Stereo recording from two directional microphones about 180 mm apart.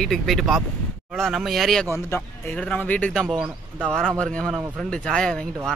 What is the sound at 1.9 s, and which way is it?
A man's voice, 10° left (ahead or behind).